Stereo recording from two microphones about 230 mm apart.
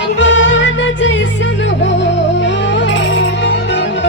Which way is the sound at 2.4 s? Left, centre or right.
Left.